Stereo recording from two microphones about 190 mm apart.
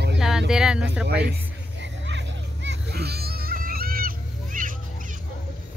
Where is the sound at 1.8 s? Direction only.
70° right (ahead or behind); by 4.7 s 45° right (ahead or behind).